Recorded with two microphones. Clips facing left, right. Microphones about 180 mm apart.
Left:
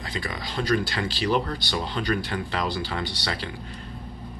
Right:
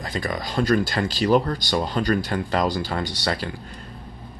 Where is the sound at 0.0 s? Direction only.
45° right (ahead or behind).